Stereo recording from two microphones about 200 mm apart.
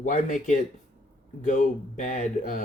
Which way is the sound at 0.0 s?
40° left (ahead or behind).